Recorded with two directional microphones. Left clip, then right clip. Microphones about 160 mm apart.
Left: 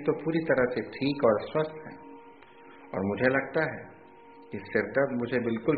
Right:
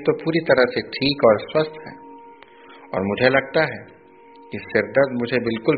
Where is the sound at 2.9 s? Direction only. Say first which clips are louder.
Right 8 dB; 30° right (ahead or behind).